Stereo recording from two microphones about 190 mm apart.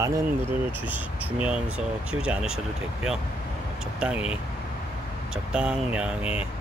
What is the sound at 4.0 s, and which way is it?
Speech, 5° right (ahead or behind).